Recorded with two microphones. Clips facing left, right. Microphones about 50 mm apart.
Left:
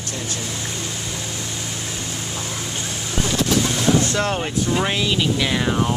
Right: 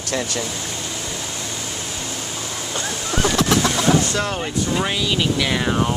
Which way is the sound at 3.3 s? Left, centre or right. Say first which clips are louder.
Right 1 dB; right.